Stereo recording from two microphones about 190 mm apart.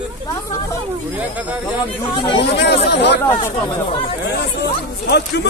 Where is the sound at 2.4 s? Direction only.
60° left (ahead or behind).